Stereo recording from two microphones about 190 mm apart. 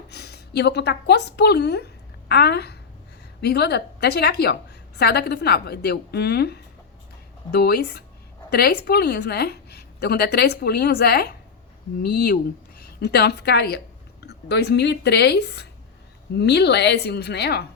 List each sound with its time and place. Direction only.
0.1 s a woman's voice: 60° left (ahead or behind)